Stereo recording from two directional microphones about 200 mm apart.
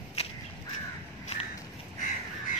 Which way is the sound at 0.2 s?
30° left (ahead or behind).